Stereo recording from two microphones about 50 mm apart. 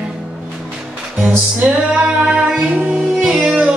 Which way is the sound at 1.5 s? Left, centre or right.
Right.